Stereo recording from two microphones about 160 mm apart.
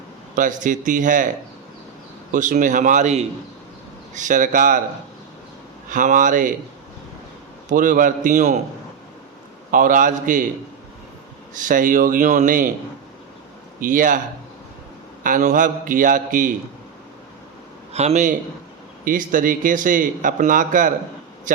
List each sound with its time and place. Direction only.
0.3 s speech: 55° right (ahead or behind)
2.3 s a man's voice: 55° right (ahead or behind)
5.9 s a man's voice: 55° right (ahead or behind)
7.7 s speech: 55° right (ahead or behind)
9.7 s a man's voice: 55° right (ahead or behind)
11.5 s a man's voice: 55° right (ahead or behind)
13.8 s a man's voice: 55° right (ahead or behind)
15.2 s a man's voice: 50° right (ahead or behind)
17.9 s a man's voice: 45° right (ahead or behind)